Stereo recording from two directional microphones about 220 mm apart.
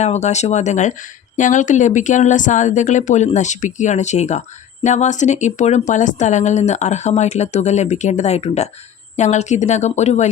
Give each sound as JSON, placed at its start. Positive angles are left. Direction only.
{"t": 0.0, "sound": "a woman's voice", "side_deg": 30}